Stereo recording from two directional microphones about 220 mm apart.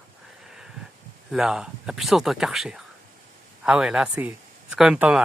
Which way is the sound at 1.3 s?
5° right (ahead or behind).